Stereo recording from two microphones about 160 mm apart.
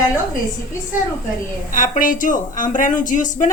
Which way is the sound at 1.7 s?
55° left (ahead or behind).